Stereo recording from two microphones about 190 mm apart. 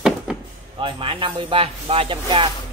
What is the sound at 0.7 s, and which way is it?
Speech, 30° right (ahead or behind).